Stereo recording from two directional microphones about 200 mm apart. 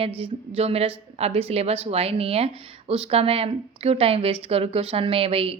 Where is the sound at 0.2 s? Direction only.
30° right (ahead or behind).